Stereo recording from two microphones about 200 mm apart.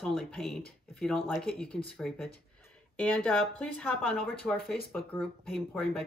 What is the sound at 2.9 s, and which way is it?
Speech, 5° left (ahead or behind).